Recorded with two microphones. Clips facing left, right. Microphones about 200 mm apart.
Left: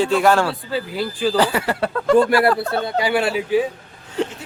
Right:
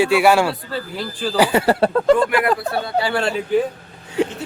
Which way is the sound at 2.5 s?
20° right (ahead or behind).